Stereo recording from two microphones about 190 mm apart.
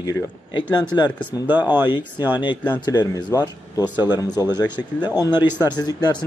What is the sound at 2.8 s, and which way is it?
Speech, 20° left (ahead or behind).